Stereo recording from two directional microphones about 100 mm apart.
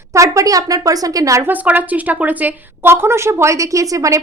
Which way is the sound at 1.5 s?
15° right (ahead or behind).